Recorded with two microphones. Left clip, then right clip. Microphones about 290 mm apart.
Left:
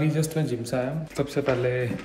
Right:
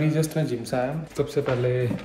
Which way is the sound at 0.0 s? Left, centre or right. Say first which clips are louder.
Right 2 dB; centre.